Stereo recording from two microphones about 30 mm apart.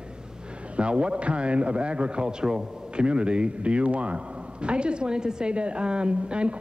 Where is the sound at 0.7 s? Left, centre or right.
Right.